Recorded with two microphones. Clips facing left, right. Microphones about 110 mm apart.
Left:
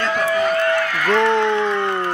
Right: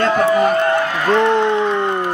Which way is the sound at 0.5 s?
25° right (ahead or behind).